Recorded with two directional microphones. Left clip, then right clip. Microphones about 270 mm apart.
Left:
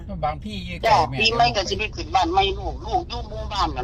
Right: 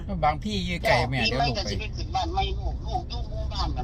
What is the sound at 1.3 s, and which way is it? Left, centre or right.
A man's voice, left.